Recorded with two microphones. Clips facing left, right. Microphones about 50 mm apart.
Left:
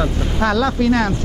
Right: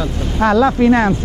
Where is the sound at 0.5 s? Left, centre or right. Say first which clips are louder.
Right 6 dB; right.